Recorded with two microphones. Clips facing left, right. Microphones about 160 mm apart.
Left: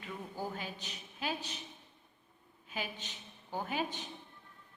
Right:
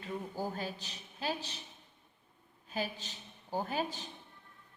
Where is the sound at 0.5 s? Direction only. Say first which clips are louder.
Right 3 dB; 35° right (ahead or behind).